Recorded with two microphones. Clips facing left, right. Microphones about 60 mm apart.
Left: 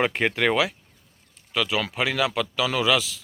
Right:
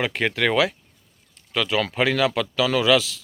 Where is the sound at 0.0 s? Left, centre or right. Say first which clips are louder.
Even; left.